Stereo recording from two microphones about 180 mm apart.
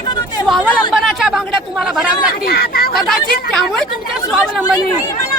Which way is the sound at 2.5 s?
55° left (ahead or behind).